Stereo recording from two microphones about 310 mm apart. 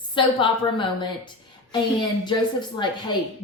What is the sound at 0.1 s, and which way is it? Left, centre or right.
Speech, centre.